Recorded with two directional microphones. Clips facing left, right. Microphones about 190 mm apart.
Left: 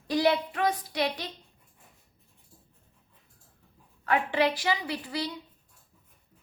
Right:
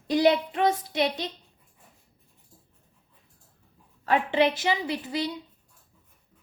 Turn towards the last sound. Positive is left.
turn(degrees=-20)  # may be behind; listen again after turning